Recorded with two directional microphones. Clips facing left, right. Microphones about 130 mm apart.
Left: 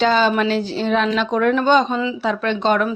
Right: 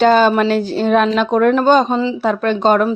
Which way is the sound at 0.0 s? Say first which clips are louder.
Right 5 dB; 50° right (ahead or behind).